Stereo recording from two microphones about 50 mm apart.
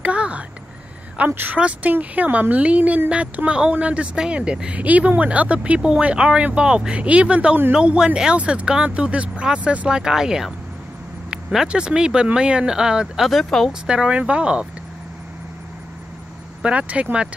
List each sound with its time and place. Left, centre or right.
0.0 s a sound: right
1.3 s speech: right
9.8 s speech: centre
11.6 s speech: centre
13.3 s speech: centre
13.7 s speech: centre
16.6 s speech: right